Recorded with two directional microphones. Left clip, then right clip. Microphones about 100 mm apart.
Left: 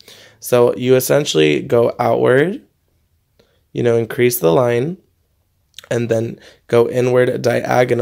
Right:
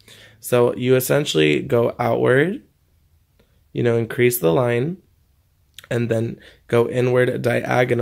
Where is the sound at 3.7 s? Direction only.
25° left (ahead or behind).